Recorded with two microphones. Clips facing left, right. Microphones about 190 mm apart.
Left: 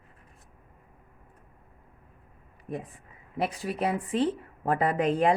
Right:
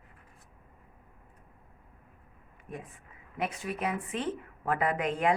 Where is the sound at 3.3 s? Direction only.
35° left (ahead or behind).